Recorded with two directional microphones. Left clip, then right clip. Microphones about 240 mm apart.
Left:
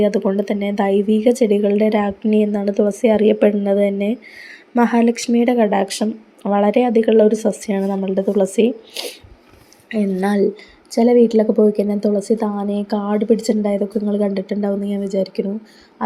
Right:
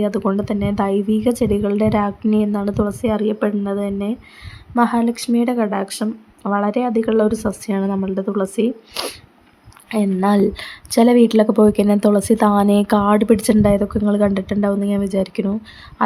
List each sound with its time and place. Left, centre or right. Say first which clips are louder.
0.0 s speech: left 3 dB; centre
9.0 s speech: right 2 dB; centre
9.9 s speech: right 2 dB; centre